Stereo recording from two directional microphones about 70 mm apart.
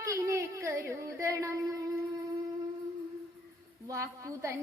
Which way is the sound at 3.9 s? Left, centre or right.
Right.